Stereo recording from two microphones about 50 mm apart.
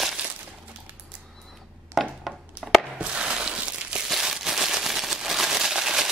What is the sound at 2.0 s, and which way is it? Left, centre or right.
Chopping, centre.